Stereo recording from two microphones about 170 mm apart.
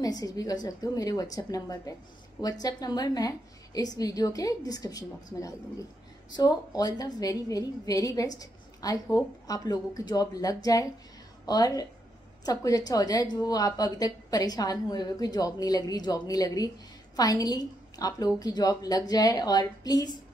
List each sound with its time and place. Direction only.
0.0 s a woman's voice: 20° left (ahead or behind)